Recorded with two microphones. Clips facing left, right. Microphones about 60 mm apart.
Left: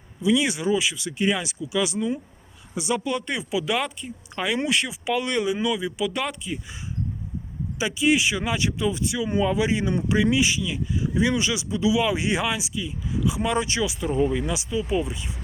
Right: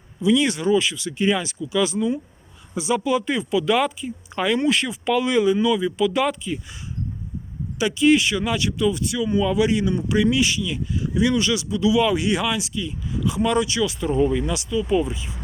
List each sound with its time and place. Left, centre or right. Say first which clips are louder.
0.2 s speech: right 3 dB; centre
7.8 s speech: right 4 dB; centre
14.8 s speech: right 4 dB; centre